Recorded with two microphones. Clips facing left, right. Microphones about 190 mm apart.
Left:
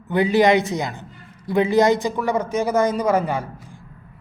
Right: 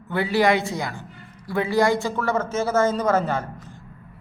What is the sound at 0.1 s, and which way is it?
A man's voice, 20° left (ahead or behind).